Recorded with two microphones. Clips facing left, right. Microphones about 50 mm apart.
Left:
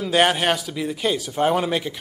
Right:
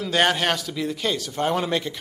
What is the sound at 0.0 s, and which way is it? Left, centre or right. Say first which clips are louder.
A man's voice: left 2 dB; centre.